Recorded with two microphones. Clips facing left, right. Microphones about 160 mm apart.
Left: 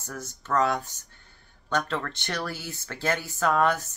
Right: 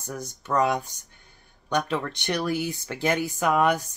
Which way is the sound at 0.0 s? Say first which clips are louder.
Right 3 dB; 15° right (ahead or behind).